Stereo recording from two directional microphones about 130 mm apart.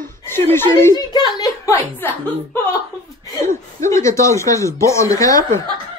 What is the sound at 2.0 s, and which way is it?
Chuckle, 15° left (ahead or behind).